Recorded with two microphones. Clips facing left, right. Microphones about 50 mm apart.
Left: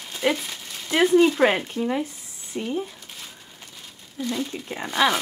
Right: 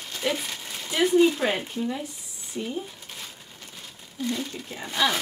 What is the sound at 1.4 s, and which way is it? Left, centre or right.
Speech, left.